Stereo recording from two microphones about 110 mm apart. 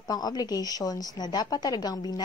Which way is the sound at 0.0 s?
35° left (ahead or behind).